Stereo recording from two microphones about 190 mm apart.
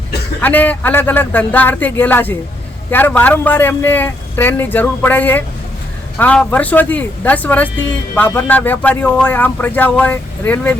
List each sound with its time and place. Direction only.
0.4 s speech: 10° left (ahead or behind)